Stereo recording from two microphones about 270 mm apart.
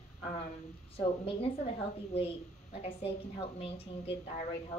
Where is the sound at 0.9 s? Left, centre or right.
Left.